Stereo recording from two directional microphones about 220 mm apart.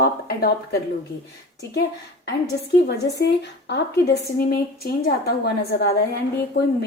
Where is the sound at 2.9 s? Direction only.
50° left (ahead or behind).